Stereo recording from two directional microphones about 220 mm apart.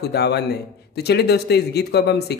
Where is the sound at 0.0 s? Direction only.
50° left (ahead or behind).